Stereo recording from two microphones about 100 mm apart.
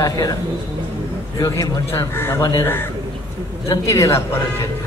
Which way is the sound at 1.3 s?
35° left (ahead or behind).